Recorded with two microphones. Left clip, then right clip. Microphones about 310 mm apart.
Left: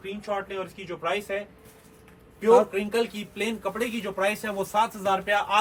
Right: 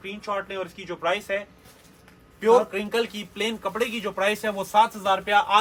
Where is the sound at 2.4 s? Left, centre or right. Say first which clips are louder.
Even; centre.